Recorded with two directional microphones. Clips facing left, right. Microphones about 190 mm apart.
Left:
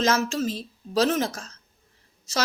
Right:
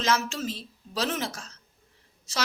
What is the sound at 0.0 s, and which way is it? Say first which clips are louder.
A woman's voice: left 4 dB; 45° left (ahead or behind).